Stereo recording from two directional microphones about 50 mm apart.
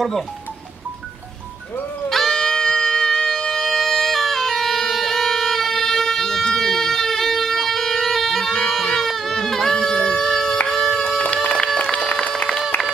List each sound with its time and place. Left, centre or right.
2.0 s music: centre
8.7 s a sound: centre
10.7 s music: centre